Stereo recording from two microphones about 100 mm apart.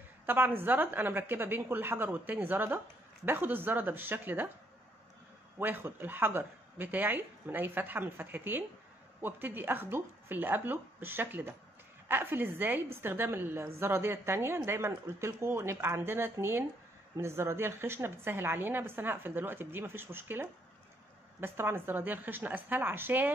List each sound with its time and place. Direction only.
0.3 s a woman's voice: 20° right (ahead or behind)
5.6 s a woman's voice: 20° right (ahead or behind)